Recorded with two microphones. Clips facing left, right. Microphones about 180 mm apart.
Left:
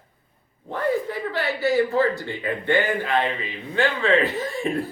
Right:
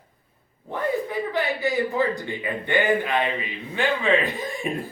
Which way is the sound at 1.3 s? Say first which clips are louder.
Left 4 dB; 15° right (ahead or behind).